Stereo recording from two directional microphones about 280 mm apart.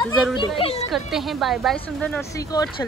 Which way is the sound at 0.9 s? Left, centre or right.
Centre.